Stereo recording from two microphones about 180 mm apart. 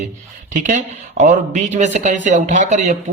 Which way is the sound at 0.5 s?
40° right (ahead or behind).